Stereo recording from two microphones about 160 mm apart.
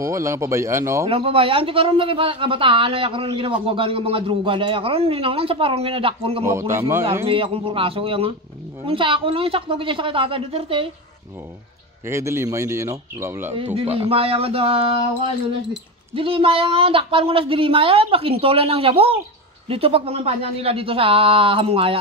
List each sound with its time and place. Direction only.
0.0 s speech: 20° right (ahead or behind)
1.0 s speech: 35° right (ahead or behind)
6.4 s speech: 15° right (ahead or behind)
7.2 s speech: 35° right (ahead or behind)
12.1 s speech: 15° right (ahead or behind)
13.9 s speech: 35° right (ahead or behind)
16.2 s speech: 35° right (ahead or behind)